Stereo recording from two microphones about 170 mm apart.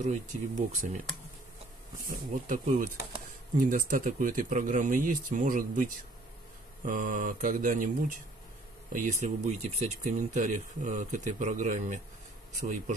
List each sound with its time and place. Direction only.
0.0 s speech: 45° right (ahead or behind)
2.0 s speech: 50° right (ahead or behind)
8.9 s speech: 50° right (ahead or behind)